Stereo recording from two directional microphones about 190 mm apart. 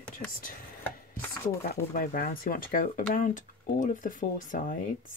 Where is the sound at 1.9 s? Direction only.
50° left (ahead or behind).